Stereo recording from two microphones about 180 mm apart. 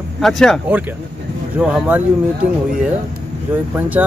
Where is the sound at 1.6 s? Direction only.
5° right (ahead or behind).